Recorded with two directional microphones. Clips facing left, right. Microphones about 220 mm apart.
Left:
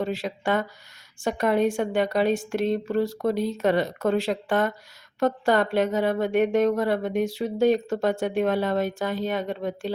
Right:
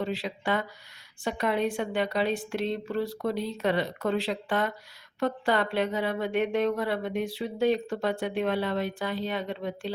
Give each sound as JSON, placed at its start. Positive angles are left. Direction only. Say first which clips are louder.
{"t": 0.0, "sound": "a woman's voice", "louder": "left 4 dB", "side_deg": 45}